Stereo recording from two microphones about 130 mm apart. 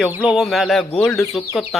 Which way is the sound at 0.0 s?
5° right (ahead or behind).